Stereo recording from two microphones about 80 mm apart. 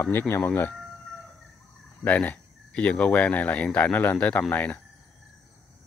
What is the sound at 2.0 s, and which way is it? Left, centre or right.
Speech, centre.